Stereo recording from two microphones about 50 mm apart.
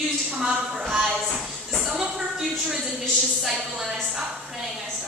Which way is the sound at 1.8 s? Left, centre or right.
Centre.